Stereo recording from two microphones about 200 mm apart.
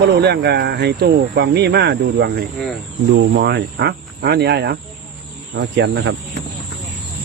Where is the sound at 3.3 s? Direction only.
55° right (ahead or behind).